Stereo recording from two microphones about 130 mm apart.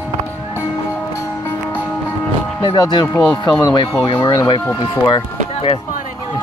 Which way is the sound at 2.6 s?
35° left (ahead or behind).